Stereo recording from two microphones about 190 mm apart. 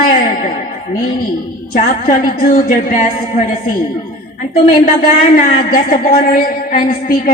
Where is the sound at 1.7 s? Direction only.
45° left (ahead or behind).